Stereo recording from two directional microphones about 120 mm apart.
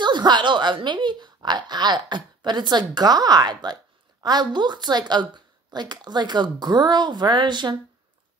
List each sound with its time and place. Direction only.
0.0 s speech: 40° right (ahead or behind)